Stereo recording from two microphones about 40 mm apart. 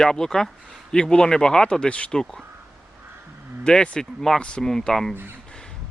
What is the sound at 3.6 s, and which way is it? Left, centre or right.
Speech, left.